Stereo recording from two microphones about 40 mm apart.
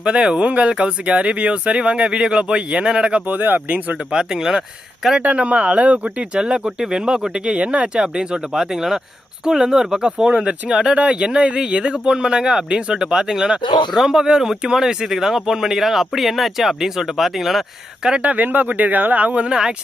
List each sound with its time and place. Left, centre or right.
0.0 s speech: right
3.2 s speech: right
4.1 s speech: centre
5.2 s speech: right
6.3 s speech: right
10.9 s speech: right; by 17.6 s centre
18.2 s speech: right
19.4 s speech: centre